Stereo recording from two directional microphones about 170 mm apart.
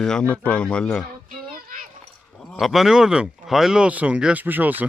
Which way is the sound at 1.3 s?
55° right (ahead or behind).